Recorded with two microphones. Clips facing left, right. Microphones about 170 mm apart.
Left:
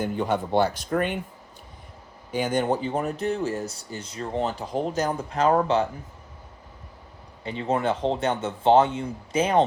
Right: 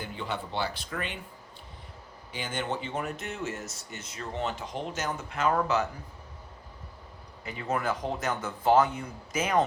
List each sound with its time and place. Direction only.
0.0 s speech: 45° left (ahead or behind)
2.3 s speech: 40° left (ahead or behind)
7.4 s speech: 25° left (ahead or behind)